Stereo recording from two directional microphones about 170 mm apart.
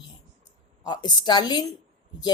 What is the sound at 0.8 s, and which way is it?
Speech, 25° left (ahead or behind).